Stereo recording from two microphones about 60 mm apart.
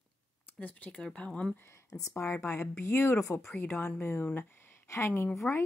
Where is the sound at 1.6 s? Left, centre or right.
Left.